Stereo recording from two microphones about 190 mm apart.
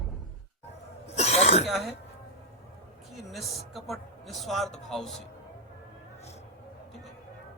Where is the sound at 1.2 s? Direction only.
35° left (ahead or behind).